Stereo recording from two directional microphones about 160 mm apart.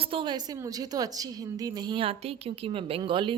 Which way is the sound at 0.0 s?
35° right (ahead or behind).